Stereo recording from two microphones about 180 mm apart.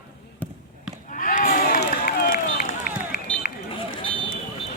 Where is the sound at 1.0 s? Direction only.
45° left (ahead or behind).